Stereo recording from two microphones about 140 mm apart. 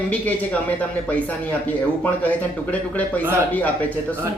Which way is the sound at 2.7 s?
10° left (ahead or behind).